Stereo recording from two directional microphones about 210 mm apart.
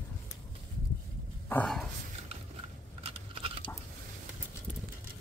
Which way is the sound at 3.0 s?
25° right (ahead or behind).